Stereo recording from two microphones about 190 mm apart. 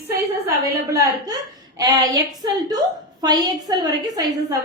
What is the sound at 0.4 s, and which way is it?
A woman's voice, 15° right (ahead or behind).